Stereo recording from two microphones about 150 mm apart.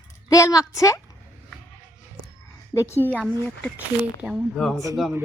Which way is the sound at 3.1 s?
10° right (ahead or behind).